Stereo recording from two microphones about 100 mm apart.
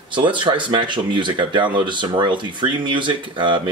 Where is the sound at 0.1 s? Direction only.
55° right (ahead or behind).